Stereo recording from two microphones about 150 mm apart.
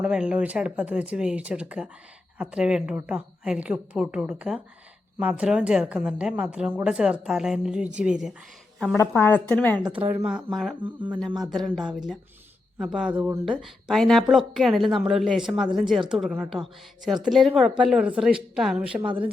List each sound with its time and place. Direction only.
0.0 s a woman's voice: 5° right (ahead or behind)
9.0 s a woman's voice: 15° left (ahead or behind)
10.2 s a woman's voice: 5° right (ahead or behind)
13.4 s speech: centre (ahead or behind)